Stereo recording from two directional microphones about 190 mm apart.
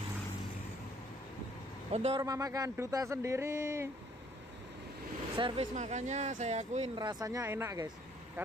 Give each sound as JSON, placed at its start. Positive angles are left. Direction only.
{"t": 1.9, "sound": "speech", "side_deg": -30}
{"t": 2.2, "sound": "speech", "side_deg": -20}
{"t": 5.3, "sound": "speech", "side_deg": -30}
{"t": 7.0, "sound": "speech", "side_deg": -20}